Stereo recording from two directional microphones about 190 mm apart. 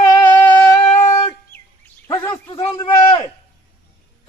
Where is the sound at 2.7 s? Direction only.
20° left (ahead or behind).